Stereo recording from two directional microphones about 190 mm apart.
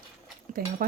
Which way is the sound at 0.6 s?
50° right (ahead or behind).